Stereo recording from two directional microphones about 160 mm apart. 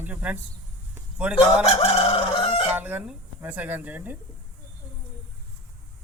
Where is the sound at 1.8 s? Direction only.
35° left (ahead or behind).